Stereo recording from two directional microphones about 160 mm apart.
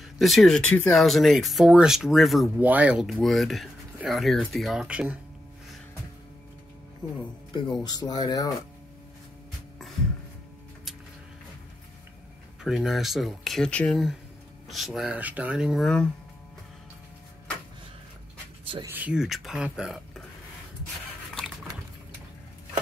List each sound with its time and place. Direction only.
0.2 s speech: centre (ahead or behind)
7.8 s speech: 25° left (ahead or behind)
12.6 s speech: centre (ahead or behind)
18.9 s speech: 10° right (ahead or behind)